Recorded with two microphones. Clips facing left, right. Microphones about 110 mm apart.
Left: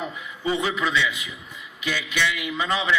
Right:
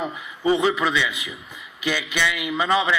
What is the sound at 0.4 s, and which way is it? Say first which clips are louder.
A man's voice: right 5 dB; 30° right (ahead or behind).